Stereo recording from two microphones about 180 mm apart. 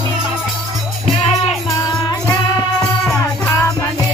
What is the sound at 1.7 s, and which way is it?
Music, 15° left (ahead or behind).